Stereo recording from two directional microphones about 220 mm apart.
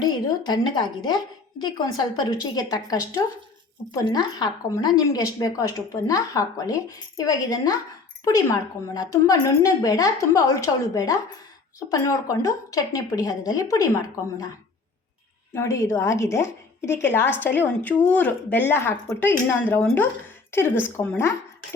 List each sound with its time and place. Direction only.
0.0 s a woman's voice: 20° left (ahead or behind)
15.5 s a woman's voice: 10° left (ahead or behind)